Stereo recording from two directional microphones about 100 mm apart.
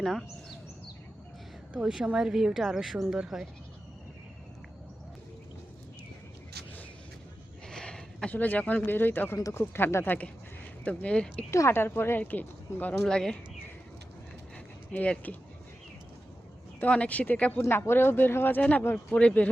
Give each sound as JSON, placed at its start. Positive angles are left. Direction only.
{"t": 0.0, "sound": "speech", "side_deg": 0}
{"t": 1.7, "sound": "speech", "side_deg": -5}
{"t": 7.7, "sound": "speech", "side_deg": 5}
{"t": 11.5, "sound": "speech", "side_deg": 25}
{"t": 14.9, "sound": "speech", "side_deg": 15}
{"t": 16.8, "sound": "speech", "side_deg": 15}